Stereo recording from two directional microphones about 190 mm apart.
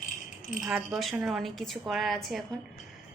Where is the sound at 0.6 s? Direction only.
Centre (ahead or behind).